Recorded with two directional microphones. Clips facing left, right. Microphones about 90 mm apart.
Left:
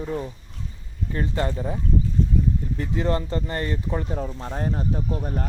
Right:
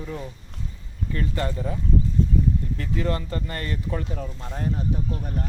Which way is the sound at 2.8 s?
25° left (ahead or behind).